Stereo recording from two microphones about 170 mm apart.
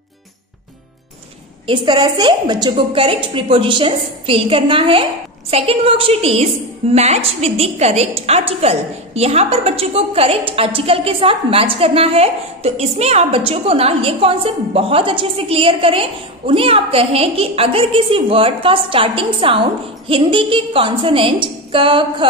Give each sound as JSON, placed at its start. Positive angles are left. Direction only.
{"t": 1.7, "sound": "a woman's voice", "side_deg": -25}